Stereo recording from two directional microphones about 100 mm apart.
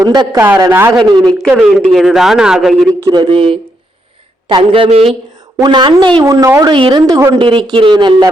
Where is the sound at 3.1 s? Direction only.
50° right (ahead or behind); by 5.1 s 70° right (ahead or behind).